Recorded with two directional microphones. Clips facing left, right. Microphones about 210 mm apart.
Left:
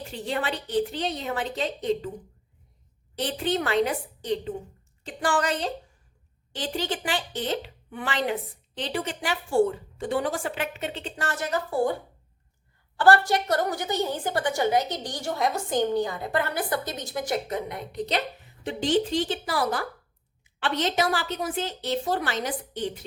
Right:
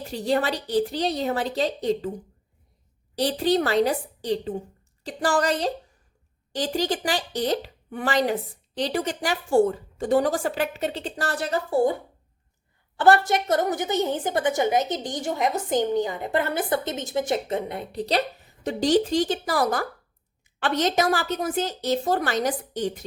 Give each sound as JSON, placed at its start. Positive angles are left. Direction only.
{"t": 0.1, "sound": "speech", "side_deg": -40}
{"t": 3.2, "sound": "speech", "side_deg": -35}
{"t": 13.0, "sound": "a woman's voice", "side_deg": -20}